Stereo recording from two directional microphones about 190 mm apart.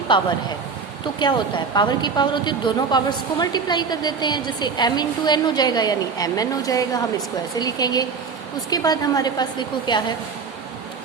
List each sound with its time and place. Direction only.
0.1 s a woman's voice: 25° left (ahead or behind)